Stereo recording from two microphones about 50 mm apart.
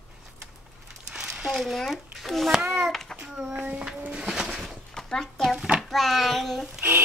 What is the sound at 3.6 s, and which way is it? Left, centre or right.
Speech, right.